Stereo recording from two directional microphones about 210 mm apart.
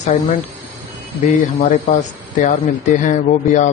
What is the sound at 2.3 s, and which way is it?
Speech, 35° left (ahead or behind).